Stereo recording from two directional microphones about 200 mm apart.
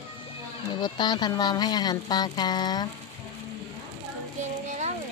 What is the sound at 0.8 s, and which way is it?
Speech, 20° left (ahead or behind).